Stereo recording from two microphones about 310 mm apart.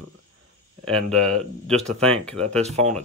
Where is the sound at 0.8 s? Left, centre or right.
Centre.